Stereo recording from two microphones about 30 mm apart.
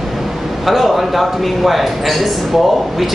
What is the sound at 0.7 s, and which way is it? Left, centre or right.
A man's voice, centre.